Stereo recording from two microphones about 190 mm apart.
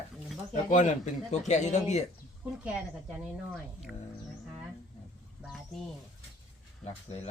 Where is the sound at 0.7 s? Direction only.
40° left (ahead or behind).